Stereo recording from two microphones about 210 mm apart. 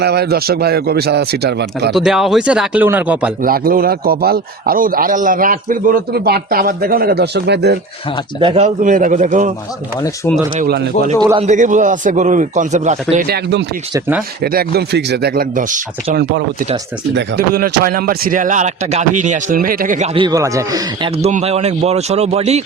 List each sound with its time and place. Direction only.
0.0 s a man's voice: 50° right (ahead or behind)
1.9 s speech: centre (ahead or behind)
3.4 s a man's voice: 45° right (ahead or behind)
8.4 s speech: 25° right (ahead or behind)
10.6 s a man's voice: 45° right (ahead or behind)
11.2 s a man's voice: 20° right (ahead or behind)
11.4 s speech: 35° right (ahead or behind)
13.2 s a man's voice: 50° right (ahead or behind)
16.1 s a man's voice: 50° right (ahead or behind)
20.1 s speech: 20° right (ahead or behind)
21.2 s speech: 30° right (ahead or behind)